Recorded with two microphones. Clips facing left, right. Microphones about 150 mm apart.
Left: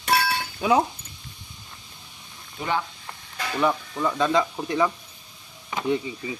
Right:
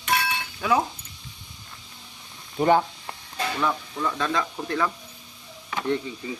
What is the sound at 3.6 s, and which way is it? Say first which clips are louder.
Speech: left 5 dB; 15° left (ahead or behind).